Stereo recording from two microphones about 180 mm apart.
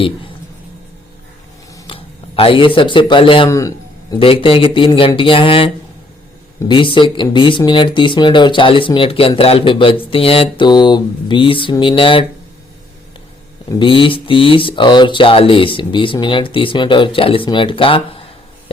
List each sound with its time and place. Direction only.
1.7 s speech: 30° left (ahead or behind)
3.5 s a sound: 20° left (ahead or behind)
4.2 s speech: 30° left (ahead or behind)
13.7 s speech: 25° left (ahead or behind)